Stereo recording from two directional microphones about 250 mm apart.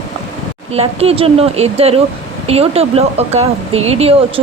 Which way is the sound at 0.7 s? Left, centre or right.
Right.